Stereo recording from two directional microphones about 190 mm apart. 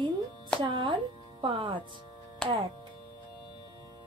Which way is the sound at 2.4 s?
5° left (ahead or behind).